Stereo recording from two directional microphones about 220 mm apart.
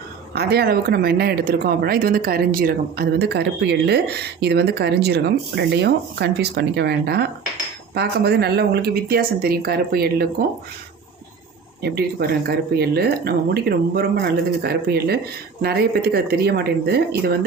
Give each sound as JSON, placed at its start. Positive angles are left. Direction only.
{"t": 0.3, "sound": "speech", "side_deg": -45}
{"t": 11.8, "sound": "speech", "side_deg": -45}